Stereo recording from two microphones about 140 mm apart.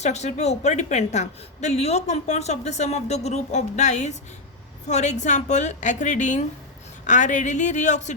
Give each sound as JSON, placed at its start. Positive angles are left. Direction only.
{"t": 0.0, "sound": "a woman's voice", "side_deg": 55}